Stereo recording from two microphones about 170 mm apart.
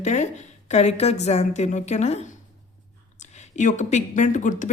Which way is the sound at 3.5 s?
45° left (ahead or behind).